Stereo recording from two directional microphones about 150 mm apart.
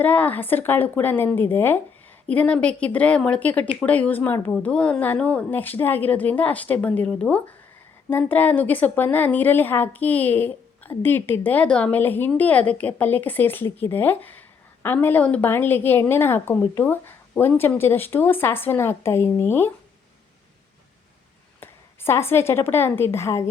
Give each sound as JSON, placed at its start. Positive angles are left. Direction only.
{"t": 0.0, "sound": "a woman's voice", "side_deg": 10}
{"t": 21.6, "sound": "a woman's voice", "side_deg": 15}